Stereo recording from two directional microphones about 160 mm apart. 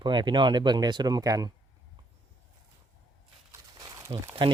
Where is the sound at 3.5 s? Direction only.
20° right (ahead or behind).